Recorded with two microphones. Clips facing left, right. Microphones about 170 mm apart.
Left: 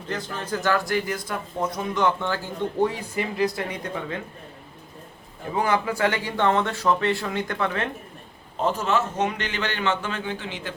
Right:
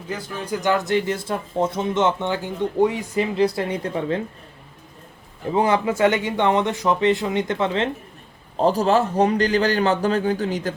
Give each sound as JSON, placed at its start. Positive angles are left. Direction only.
{"t": 0.1, "sound": "speech", "side_deg": -10}
{"t": 5.5, "sound": "speech", "side_deg": -25}
{"t": 8.5, "sound": "a man's voice", "side_deg": -35}